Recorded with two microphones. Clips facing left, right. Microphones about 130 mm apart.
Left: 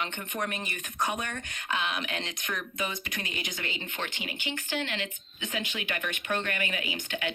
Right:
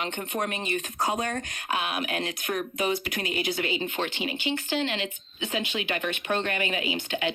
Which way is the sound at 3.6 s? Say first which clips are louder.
Right 8 dB; 15° right (ahead or behind).